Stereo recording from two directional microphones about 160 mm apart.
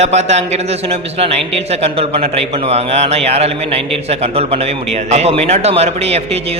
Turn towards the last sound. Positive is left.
turn(degrees=-40)  # may be behind; listen again after turning